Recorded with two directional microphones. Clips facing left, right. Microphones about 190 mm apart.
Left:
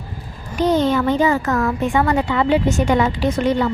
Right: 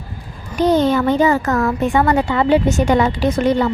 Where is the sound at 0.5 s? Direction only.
40° right (ahead or behind).